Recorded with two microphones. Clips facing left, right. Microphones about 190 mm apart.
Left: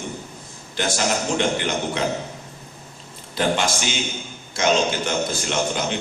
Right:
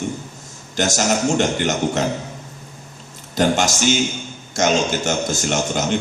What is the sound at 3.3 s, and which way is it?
A man's voice, 45° right (ahead or behind).